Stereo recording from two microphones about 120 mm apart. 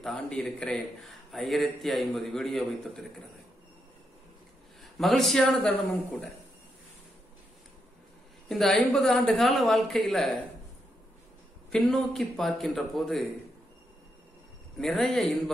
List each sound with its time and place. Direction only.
0.0 s a man's voice: 5° left (ahead or behind)
4.9 s a man's voice: centre (ahead or behind)
8.5 s a man's voice: centre (ahead or behind)
11.7 s a man's voice: 5° left (ahead or behind)
14.8 s a man's voice: 5° left (ahead or behind)